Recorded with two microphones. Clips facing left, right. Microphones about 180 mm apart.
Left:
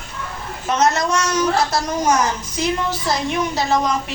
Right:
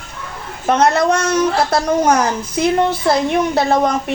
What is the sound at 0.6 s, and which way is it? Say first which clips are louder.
A woman's voice: right 5 dB; 55° right (ahead or behind).